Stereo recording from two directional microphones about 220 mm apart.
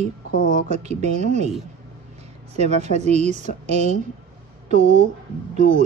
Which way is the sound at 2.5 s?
30° right (ahead or behind).